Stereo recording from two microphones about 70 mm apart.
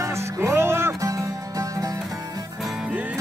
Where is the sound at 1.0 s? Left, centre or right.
Right.